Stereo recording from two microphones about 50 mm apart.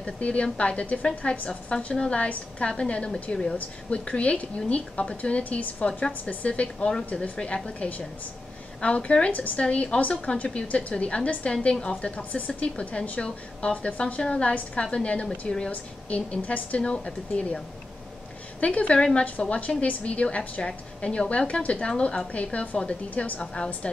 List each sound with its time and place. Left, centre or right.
0.0 s a woman's voice: left
15.2 s speech: centre
15.7 s a woman's voice: left
18.6 s a woman's voice: left